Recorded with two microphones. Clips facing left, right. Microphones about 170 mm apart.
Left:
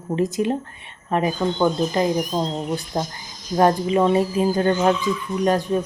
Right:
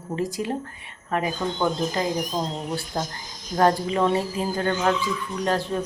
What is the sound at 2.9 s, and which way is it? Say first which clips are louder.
A woman's voice: left 3 dB; 20° left (ahead or behind).